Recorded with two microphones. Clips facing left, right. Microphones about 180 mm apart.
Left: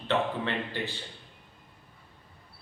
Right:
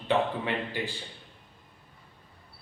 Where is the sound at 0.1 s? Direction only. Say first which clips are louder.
Right 2 dB; 10° right (ahead or behind).